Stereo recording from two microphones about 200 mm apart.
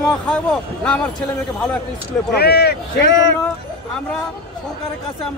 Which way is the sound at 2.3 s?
55° left (ahead or behind).